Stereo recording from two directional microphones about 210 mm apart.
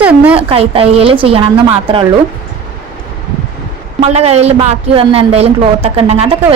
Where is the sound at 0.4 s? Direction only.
25° right (ahead or behind).